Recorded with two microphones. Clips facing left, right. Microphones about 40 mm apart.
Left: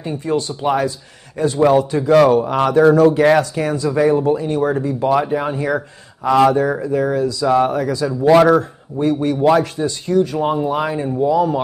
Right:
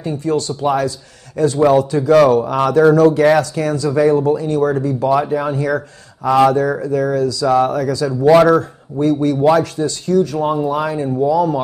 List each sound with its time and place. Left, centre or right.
0.0 s a man's voice: centre